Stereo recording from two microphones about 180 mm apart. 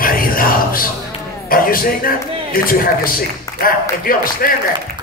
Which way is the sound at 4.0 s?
50° left (ahead or behind).